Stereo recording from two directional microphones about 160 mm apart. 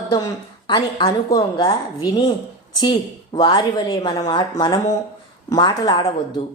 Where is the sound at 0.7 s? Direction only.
30° left (ahead or behind).